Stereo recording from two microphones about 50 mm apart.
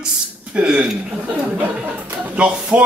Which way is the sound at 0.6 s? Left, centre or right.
Right.